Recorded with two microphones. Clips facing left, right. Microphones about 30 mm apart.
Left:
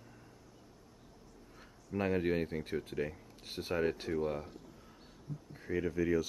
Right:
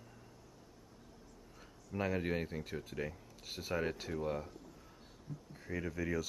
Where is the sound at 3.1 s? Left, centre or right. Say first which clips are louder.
Left 3 dB; centre.